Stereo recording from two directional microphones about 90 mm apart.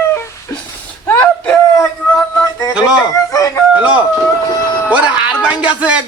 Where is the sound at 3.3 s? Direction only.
40° left (ahead or behind).